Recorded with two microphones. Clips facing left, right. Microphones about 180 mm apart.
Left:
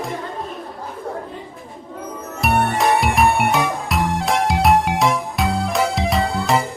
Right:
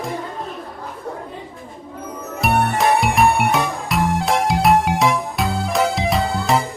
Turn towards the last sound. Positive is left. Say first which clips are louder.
# even
turn(degrees=0)  # may be behind; listen again after turning